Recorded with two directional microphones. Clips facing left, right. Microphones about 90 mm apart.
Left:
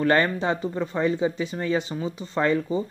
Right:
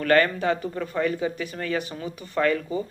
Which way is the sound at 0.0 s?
20° left (ahead or behind).